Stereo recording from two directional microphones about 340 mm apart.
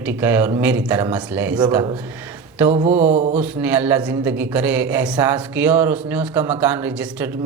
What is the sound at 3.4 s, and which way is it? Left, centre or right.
A man's voice, centre.